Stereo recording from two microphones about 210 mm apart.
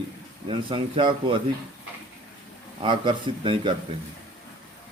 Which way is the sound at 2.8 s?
25° right (ahead or behind).